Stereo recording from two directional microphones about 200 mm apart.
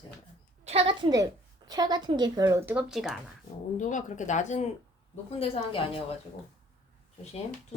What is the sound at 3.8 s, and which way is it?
A woman's voice, 40° left (ahead or behind).